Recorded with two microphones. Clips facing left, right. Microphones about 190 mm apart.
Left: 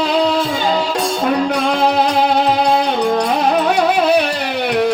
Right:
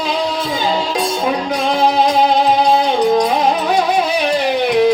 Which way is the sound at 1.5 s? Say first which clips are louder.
Even; 65° left (ahead or behind).